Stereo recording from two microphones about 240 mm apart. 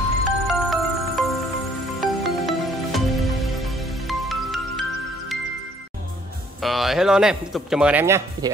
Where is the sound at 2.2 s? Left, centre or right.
Centre.